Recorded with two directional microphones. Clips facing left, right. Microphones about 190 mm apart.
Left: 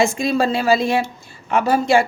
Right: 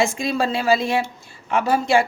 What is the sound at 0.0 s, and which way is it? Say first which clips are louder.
A woman's voice: left 3 dB; 40° left (ahead or behind).